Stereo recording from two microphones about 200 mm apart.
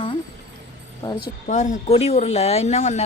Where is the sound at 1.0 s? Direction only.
20° left (ahead or behind).